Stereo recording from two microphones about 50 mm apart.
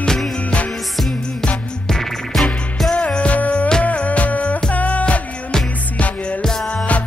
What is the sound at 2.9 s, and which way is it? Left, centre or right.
Music, left.